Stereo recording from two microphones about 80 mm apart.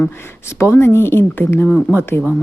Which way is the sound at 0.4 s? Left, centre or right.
Left.